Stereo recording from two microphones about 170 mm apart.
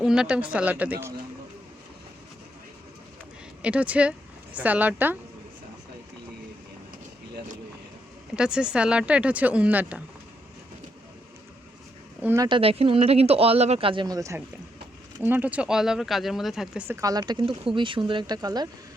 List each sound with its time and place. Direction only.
0.0 s speech: 5° right (ahead or behind)
3.6 s speech: 10° right (ahead or behind)
8.4 s speech: 5° right (ahead or behind)
12.2 s speech: 15° right (ahead or behind)
12.5 s speech: 35° right (ahead or behind); by 17.0 s 5° right (ahead or behind)
17.0 s speech: 20° right (ahead or behind)